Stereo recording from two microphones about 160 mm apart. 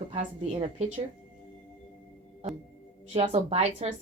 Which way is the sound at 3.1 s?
40° right (ahead or behind).